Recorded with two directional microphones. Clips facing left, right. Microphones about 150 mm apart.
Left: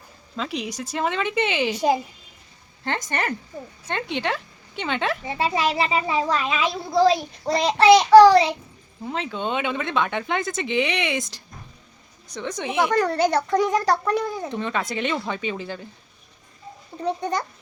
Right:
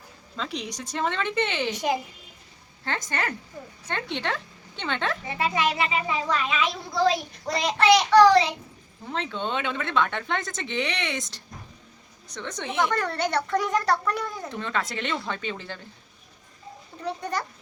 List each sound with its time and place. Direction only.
0.3 s speech: 10° left (ahead or behind)
1.7 s a child's voice: 30° left (ahead or behind)
3.1 s speech: 15° left (ahead or behind)
5.2 s a child's voice: 30° left (ahead or behind)
9.0 s speech: 10° left (ahead or behind)
13.0 s a child's voice: 35° left (ahead or behind)
14.5 s speech: 15° left (ahead or behind)
17.0 s a child's voice: 30° left (ahead or behind)